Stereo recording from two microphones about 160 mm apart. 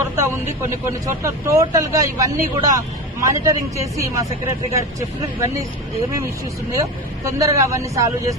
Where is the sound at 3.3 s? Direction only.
20° right (ahead or behind).